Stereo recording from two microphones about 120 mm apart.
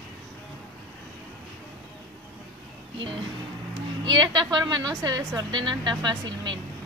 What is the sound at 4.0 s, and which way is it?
A woman's voice, 35° right (ahead or behind).